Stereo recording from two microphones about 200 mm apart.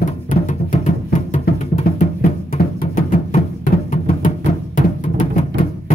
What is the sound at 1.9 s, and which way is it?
Music, 45° left (ahead or behind).